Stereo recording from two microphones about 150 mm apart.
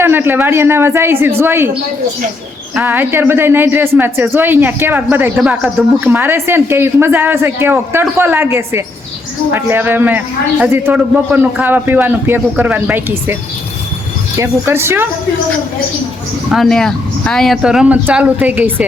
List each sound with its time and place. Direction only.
0.0 s a man's voice: 15° right (ahead or behind)
2.7 s a man's voice: 10° right (ahead or behind)
14.3 s a man's voice: 15° right (ahead or behind)
16.5 s speech: centre (ahead or behind)